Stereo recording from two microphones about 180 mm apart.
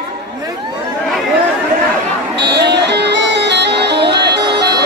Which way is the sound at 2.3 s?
70° right (ahead or behind).